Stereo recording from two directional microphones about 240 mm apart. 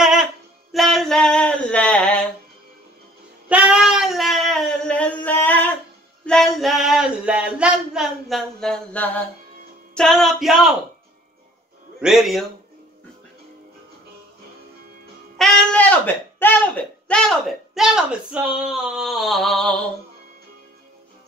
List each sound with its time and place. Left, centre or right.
0.0 s music: centre
3.4 s child singing: centre
6.2 s a sound: centre
9.9 s music: centre
12.0 s music: centre
15.3 s speech: centre